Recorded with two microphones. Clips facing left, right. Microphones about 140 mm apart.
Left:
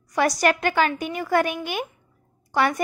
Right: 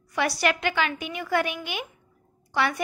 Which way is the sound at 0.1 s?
40° left (ahead or behind).